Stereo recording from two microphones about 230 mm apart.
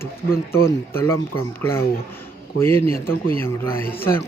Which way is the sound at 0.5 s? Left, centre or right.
Centre.